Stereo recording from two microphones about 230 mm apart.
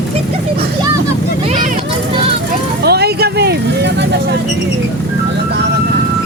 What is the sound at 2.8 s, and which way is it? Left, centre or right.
Vehicle, right.